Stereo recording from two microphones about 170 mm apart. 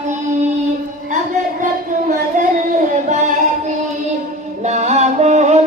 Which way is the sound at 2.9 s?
45° right (ahead or behind).